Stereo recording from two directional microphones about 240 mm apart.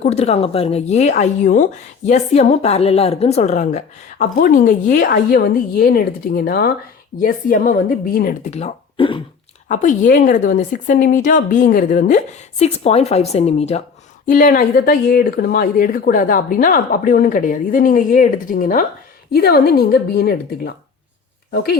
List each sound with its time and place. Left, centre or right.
0.0 s speech: left
9.6 s speech: left